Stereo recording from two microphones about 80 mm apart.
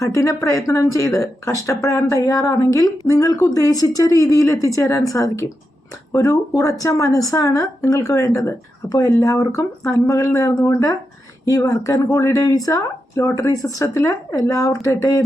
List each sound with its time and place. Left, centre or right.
0.0 s speech: left